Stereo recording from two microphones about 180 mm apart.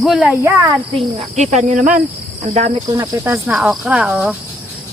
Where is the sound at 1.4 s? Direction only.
40° right (ahead or behind).